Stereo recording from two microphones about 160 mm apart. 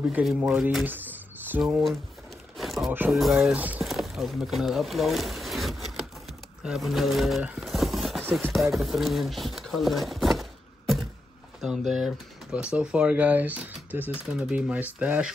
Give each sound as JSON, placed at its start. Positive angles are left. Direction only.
{"t": 0.1, "sound": "speech", "side_deg": -5}
{"t": 2.5, "sound": "a sound", "side_deg": 0}
{"t": 3.1, "sound": "speech", "side_deg": 0}